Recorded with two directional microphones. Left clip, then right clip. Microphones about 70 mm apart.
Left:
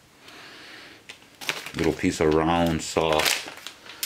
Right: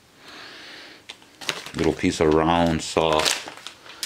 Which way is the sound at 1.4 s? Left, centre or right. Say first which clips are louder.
Right 2 dB; centre.